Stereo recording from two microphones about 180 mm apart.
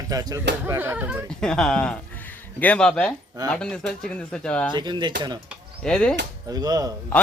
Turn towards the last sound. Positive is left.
turn(degrees=-20)  # may be behind; listen again after turning